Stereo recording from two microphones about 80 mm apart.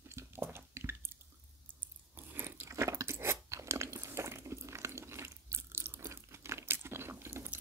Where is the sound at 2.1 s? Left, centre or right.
Right.